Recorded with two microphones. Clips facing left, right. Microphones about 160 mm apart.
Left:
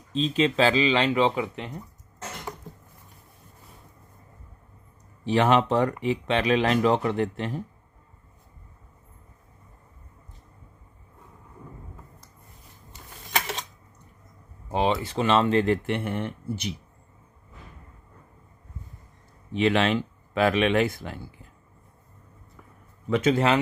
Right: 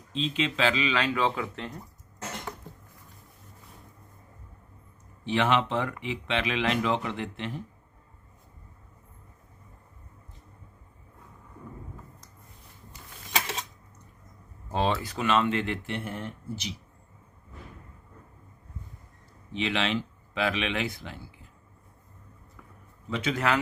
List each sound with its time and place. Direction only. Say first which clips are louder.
0.1 s speech: left 6 dB; 40° left (ahead or behind); by 1.8 s 15° left (ahead or behind)
5.2 s speech: left 4 dB; 40° left (ahead or behind)
14.7 s speech: left 3 dB; 15° left (ahead or behind); by 15.8 s 40° left (ahead or behind)
15.9 s speech: left 6 dB; 70° left (ahead or behind)
19.5 s speech: left 6 dB; 50° left (ahead or behind)
23.2 s a man's voice: left 5 dB; 30° left (ahead or behind)